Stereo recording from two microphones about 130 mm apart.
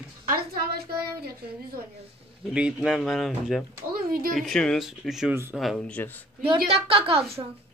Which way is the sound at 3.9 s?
90° right.